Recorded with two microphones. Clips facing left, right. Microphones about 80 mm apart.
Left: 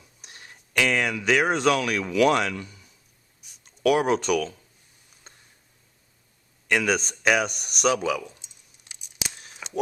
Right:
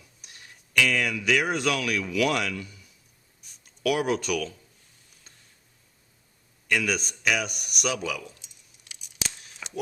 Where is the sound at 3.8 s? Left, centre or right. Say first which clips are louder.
Left 4 dB; left.